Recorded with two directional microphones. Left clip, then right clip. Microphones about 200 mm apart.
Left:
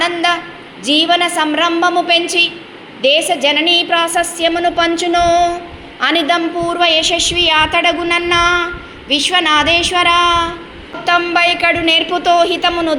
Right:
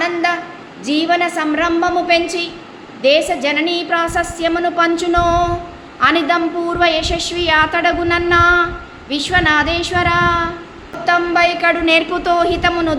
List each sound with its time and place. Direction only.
0.0 s a woman's voice: 5° left (ahead or behind)